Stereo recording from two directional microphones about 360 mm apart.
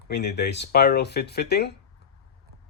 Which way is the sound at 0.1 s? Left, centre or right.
Left.